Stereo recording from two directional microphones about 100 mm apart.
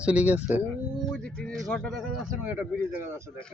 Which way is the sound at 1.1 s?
10° left (ahead or behind).